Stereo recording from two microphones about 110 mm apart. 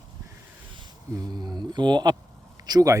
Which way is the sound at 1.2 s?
40° right (ahead or behind).